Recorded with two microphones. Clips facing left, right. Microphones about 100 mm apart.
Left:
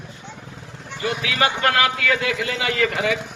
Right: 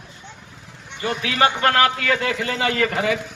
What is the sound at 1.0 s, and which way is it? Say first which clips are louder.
A man's voice: right 2 dB; 35° right (ahead or behind).